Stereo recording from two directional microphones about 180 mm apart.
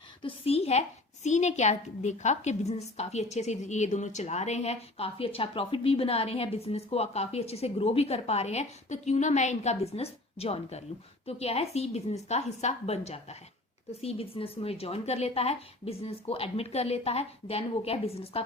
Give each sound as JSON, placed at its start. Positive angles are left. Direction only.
{"t": 0.2, "sound": "a woman's voice", "side_deg": 30}